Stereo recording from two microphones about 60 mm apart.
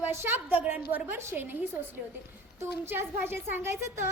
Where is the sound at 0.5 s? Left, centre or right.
Right.